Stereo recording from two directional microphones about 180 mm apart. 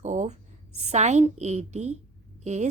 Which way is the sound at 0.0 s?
40° right (ahead or behind).